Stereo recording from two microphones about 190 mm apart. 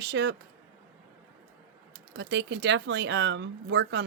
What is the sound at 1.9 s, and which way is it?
Speech, 70° right (ahead or behind).